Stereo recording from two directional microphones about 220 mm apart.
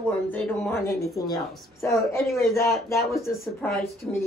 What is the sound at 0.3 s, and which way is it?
Speech, 10° left (ahead or behind).